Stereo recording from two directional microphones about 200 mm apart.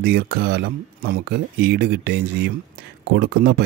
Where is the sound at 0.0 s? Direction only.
55° right (ahead or behind).